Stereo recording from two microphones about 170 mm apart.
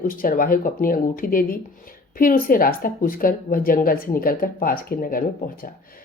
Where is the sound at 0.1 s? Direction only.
55° left (ahead or behind).